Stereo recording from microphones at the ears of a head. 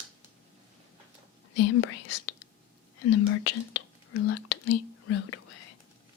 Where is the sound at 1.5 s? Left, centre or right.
Left.